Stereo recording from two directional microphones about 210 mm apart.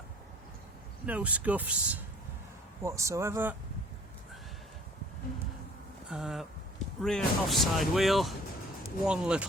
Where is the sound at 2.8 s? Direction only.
15° right (ahead or behind).